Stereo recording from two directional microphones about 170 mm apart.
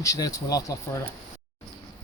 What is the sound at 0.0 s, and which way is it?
Speech, 20° left (ahead or behind).